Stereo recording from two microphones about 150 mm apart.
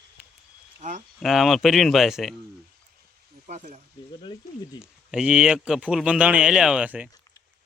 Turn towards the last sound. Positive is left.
turn(degrees=-10)  # may be behind; listen again after turning